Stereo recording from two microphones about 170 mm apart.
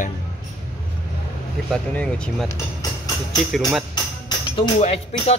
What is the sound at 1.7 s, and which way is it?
Speech, 5° left (ahead or behind).